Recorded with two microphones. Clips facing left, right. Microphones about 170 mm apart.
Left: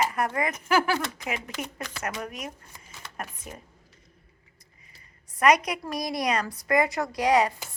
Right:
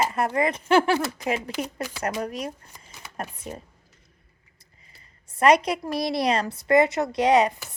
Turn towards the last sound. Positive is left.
turn(degrees=-20)  # may be behind; listen again after turning